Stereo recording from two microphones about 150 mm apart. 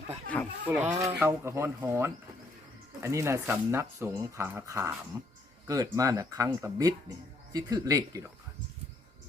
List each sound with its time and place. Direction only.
0.3 s a sound: 10° left (ahead or behind)
0.7 s speech: 10° right (ahead or behind)
0.9 s speech: 20° right (ahead or behind)